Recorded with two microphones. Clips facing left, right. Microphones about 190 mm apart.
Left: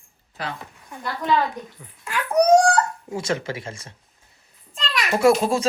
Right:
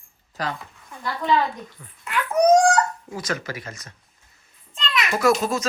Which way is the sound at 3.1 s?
25° left (ahead or behind).